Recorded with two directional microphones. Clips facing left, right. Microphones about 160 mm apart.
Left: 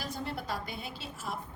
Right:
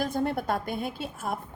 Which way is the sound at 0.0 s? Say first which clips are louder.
Right 10 dB; 50° right (ahead or behind).